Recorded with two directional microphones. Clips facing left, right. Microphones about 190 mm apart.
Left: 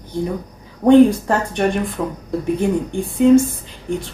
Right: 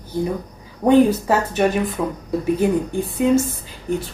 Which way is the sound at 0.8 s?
5° right (ahead or behind).